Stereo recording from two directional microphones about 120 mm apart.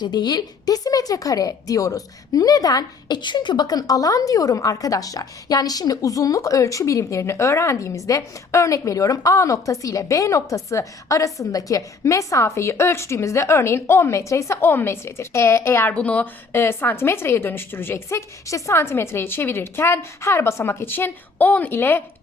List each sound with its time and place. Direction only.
0.0 s speech: 35° left (ahead or behind); by 22.0 s 15° left (ahead or behind)